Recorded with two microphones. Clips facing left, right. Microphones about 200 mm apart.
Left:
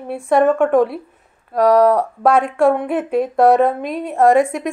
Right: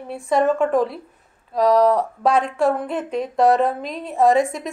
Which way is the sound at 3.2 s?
50° left (ahead or behind).